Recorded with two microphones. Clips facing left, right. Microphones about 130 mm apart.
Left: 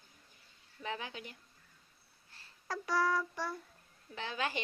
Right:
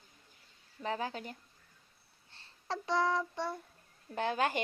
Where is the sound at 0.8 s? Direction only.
40° right (ahead or behind).